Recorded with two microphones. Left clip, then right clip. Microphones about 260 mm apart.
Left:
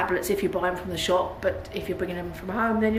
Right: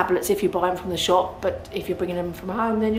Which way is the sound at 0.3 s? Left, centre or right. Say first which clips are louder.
Right 3 dB; centre.